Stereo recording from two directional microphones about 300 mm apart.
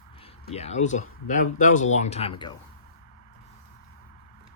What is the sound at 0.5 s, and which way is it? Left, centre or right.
Speech, left.